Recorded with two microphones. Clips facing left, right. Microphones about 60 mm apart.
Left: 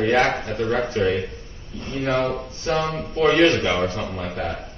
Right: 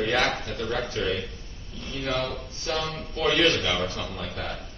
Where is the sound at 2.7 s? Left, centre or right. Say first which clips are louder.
Left 7 dB; left.